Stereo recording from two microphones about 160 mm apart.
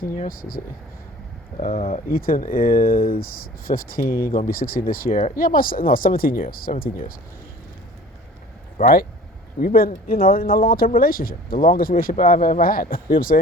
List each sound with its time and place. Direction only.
0.0 s speech: 60° left (ahead or behind)
1.9 s speech: 65° left (ahead or behind)
8.8 s speech: 70° left (ahead or behind)